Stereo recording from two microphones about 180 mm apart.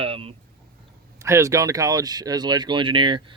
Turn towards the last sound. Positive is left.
turn(degrees=-25)  # may be behind; listen again after turning